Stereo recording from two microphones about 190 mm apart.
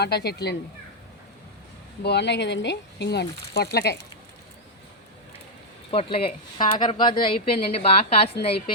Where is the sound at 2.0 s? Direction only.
65° left (ahead or behind).